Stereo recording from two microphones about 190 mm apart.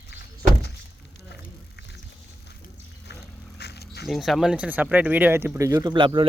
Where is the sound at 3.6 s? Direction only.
60° left (ahead or behind).